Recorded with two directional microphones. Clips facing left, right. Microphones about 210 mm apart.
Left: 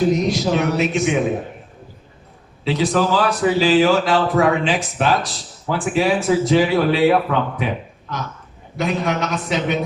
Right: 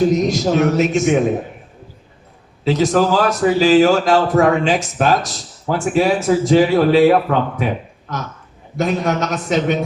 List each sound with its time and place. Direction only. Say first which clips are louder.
0.1 s a man's voice: right 2 dB; 45° right (ahead or behind)
2.6 s a man's voice: right 3 dB; 45° right (ahead or behind)
8.7 s a man's voice: right 3 dB; 45° right (ahead or behind)